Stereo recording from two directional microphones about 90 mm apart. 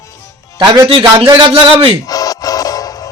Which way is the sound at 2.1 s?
40° left (ahead or behind).